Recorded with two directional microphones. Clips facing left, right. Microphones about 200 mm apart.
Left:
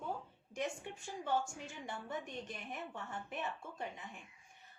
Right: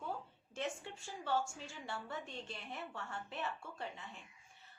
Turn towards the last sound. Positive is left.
turn(degrees=15)  # may be behind; listen again after turning